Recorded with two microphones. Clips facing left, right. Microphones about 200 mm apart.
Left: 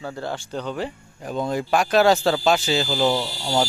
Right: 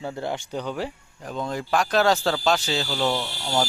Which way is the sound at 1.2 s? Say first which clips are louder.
Left 4 dB; 10° left (ahead or behind).